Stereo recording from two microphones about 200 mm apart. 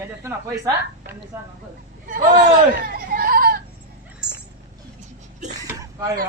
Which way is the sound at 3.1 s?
45° right (ahead or behind).